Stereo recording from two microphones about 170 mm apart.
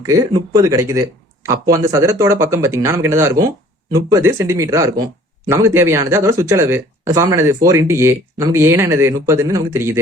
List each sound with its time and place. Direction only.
0.0 s speech: 20° right (ahead or behind)